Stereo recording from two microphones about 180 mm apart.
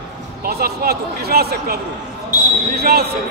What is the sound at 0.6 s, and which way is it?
Speech, 60° right (ahead or behind).